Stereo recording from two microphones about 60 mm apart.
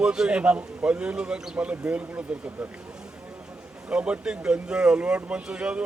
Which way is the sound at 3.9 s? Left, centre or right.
Centre.